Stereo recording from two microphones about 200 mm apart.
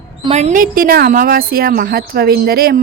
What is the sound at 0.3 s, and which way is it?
A woman's voice, 35° right (ahead or behind).